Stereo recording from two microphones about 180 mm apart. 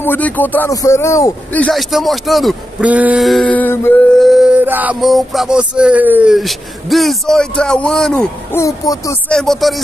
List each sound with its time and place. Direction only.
0.0 s speech: 10° left (ahead or behind)
4.2 s male singing: centre (ahead or behind)
8.5 s speech: 20° left (ahead or behind)
9.3 s male singing: centre (ahead or behind)